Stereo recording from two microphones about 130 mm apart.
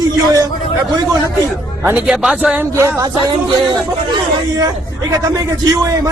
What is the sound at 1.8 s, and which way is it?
Speech, 10° right (ahead or behind).